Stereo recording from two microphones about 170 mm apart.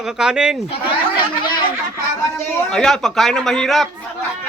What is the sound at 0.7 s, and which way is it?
Speech, 30° left (ahead or behind).